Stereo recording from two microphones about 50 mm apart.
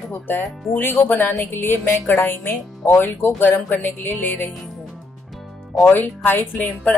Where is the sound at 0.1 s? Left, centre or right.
Left.